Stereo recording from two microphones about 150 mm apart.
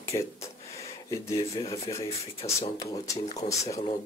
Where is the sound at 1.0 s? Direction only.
20° left (ahead or behind).